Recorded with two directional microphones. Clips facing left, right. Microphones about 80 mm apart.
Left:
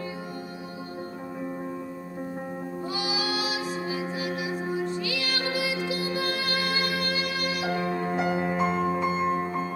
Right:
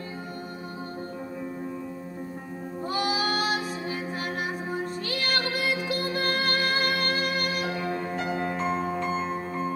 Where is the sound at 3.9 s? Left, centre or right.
Right.